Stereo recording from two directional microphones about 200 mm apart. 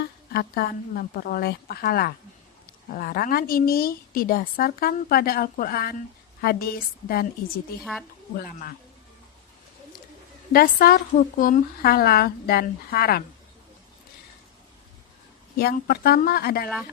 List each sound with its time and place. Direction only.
0.0 s a woman's voice: 50° left (ahead or behind)
10.5 s a woman's voice: 45° left (ahead or behind)
15.5 s a woman's voice: 50° left (ahead or behind)